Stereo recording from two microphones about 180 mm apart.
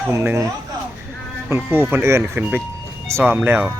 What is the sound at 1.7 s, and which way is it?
Speech, 10° right (ahead or behind).